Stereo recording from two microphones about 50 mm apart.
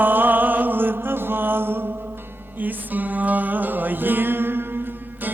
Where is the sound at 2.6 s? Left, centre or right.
Right.